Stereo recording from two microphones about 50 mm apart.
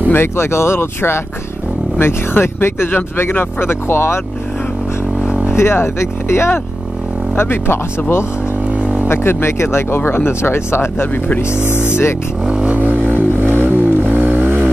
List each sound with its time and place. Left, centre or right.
0.1 s speech: left
5.2 s vehicle: centre
5.5 s speech: left
8.6 s vehicle: right
9.0 s speech: left
12.4 s a sound: right
13.1 s vehicle: right